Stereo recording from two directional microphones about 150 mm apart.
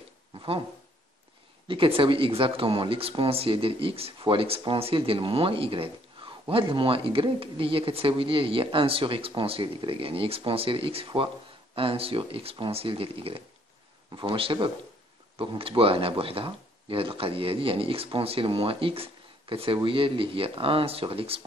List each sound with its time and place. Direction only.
1.7 s speech: 35° right (ahead or behind)